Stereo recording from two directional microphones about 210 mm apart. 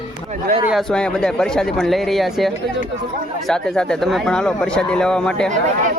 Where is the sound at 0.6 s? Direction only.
Centre (ahead or behind).